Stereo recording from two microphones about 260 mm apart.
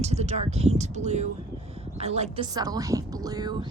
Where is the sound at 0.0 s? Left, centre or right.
Right.